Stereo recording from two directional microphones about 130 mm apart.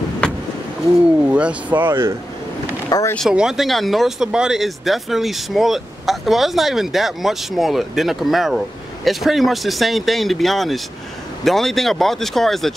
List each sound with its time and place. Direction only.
0.2 s vehicle: 10° left (ahead or behind)
1.2 s speech: 10° right (ahead or behind)
2.9 s speech: 25° left (ahead or behind)
3.2 s speech: 5° right (ahead or behind)